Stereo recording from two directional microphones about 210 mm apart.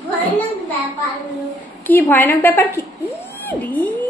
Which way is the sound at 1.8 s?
10° left (ahead or behind).